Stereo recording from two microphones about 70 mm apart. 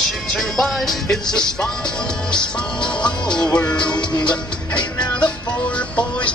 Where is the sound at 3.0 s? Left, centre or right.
Centre.